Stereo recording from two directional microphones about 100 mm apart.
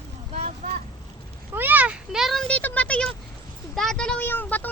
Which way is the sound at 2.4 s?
15° left (ahead or behind).